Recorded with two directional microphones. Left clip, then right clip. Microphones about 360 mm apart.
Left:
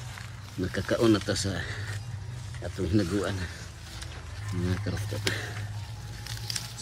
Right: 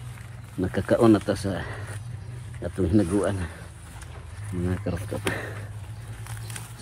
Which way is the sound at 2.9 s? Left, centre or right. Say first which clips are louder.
Right 5 dB; centre.